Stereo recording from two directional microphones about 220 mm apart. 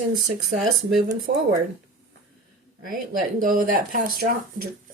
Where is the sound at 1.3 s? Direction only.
45° right (ahead or behind).